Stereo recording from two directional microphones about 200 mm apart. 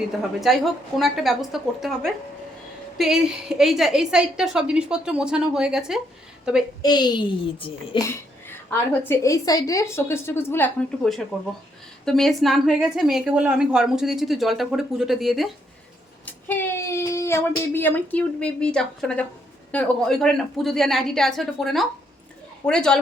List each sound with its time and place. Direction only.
0.3 s a woman's voice: centre (ahead or behind)
6.8 s a child's voice: 20° left (ahead or behind); by 23.0 s 5° left (ahead or behind)